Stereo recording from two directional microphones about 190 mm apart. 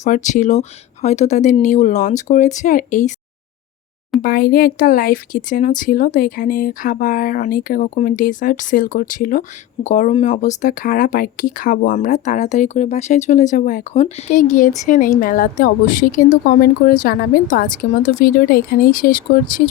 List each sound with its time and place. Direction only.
0.0 s speech: 40° left (ahead or behind)
4.2 s speech: 50° left (ahead or behind)